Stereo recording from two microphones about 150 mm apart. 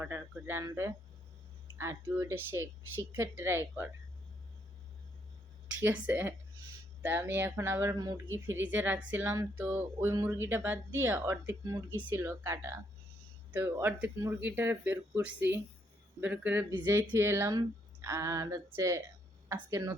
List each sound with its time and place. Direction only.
0.0 s speech: 15° right (ahead or behind)
5.8 s speech: 15° right (ahead or behind)